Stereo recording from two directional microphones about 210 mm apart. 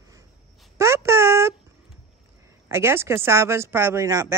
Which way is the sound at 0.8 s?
15° right (ahead or behind).